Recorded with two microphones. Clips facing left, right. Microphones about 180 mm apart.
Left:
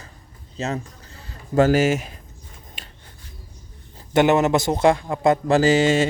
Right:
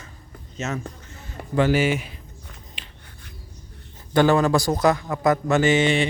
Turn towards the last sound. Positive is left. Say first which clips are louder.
# left 2 dB
turn(degrees=40)  # may be behind; listen again after turning